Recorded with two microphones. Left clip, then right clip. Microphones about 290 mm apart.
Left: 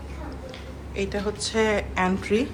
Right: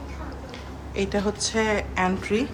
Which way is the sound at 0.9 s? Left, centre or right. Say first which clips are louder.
Right 2 dB; centre.